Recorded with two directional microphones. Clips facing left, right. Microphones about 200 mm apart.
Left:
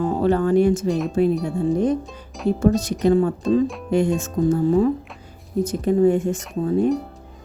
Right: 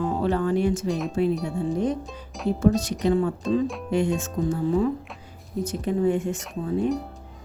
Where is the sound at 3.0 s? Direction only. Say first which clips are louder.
Left 5 dB; 45° left (ahead or behind).